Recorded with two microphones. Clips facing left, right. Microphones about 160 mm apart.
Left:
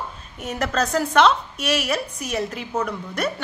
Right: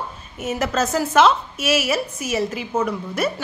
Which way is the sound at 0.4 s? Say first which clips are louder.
Right 2 dB; 5° right (ahead or behind).